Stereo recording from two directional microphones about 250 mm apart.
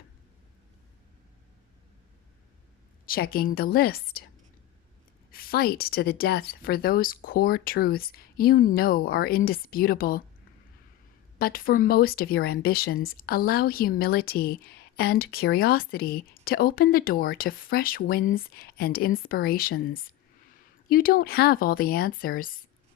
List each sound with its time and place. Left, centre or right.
3.1 s speech: left
5.3 s speech: left
11.3 s speech: left